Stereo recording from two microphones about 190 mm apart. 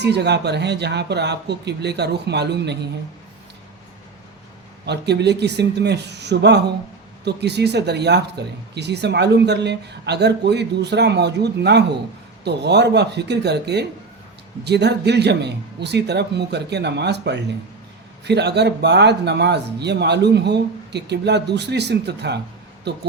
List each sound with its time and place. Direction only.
0.0 s speech: 60° right (ahead or behind)
4.9 s speech: 60° right (ahead or behind)